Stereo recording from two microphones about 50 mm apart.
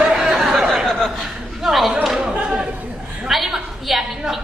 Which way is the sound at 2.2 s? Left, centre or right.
Centre.